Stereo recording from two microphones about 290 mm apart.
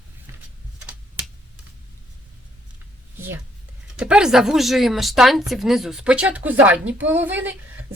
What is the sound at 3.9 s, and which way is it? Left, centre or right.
Speech, centre.